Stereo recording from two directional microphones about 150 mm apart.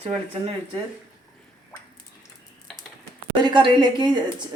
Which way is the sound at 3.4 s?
30° right (ahead or behind).